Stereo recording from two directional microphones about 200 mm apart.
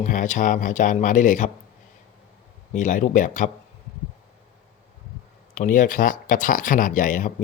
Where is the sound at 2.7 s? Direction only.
40° left (ahead or behind).